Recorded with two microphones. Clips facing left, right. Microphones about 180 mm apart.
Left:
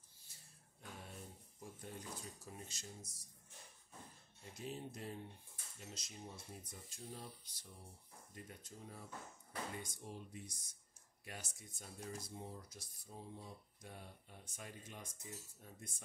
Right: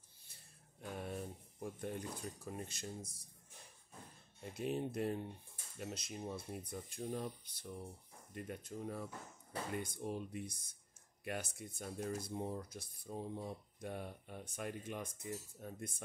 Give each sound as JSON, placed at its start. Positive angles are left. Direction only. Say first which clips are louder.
{"t": 0.9, "sound": "speech", "louder": "right 11 dB", "side_deg": -60}
{"t": 4.6, "sound": "speech", "louder": "right 9 dB", "side_deg": -60}